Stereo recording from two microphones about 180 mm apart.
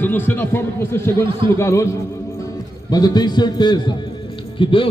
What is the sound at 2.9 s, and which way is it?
A man's voice, 20° left (ahead or behind).